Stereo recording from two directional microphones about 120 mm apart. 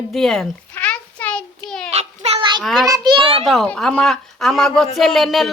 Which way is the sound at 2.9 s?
35° right (ahead or behind).